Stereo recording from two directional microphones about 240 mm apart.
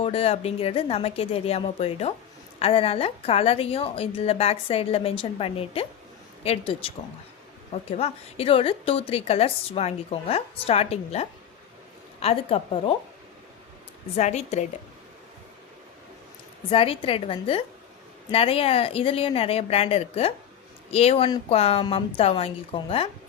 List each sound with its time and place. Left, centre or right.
0.0 s a woman's voice: left
14.2 s a woman's voice: left
16.6 s a woman's voice: left